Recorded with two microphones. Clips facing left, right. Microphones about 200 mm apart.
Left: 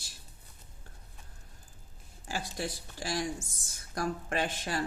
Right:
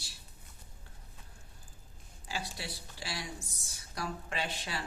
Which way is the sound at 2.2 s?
45° left (ahead or behind).